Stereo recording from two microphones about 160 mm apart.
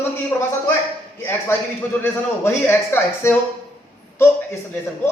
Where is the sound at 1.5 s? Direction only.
15° left (ahead or behind).